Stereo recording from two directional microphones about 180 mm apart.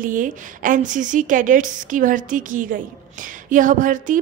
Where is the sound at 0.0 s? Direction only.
50° right (ahead or behind).